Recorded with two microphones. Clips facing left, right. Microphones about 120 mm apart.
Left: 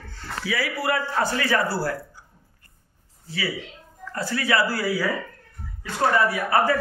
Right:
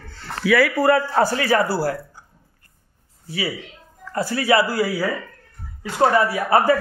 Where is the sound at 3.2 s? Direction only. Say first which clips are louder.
Right 3 dB; 20° right (ahead or behind).